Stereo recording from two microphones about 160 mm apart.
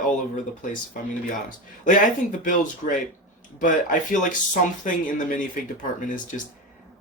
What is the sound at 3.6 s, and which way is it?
Speech, 55° left (ahead or behind).